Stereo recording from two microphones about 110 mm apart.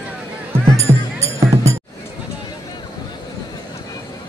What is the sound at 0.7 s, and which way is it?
Music, 25° right (ahead or behind).